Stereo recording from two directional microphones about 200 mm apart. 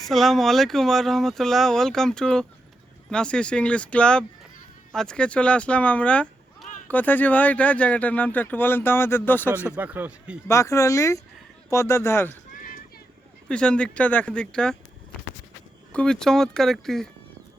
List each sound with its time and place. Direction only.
0.1 s speech: centre (ahead or behind)
9.7 s speech: 10° right (ahead or behind)
10.5 s speech: 15° left (ahead or behind)
12.5 s clip-clop: 40° left (ahead or behind)
13.5 s speech: 5° left (ahead or behind)
15.9 s speech: 5° left (ahead or behind)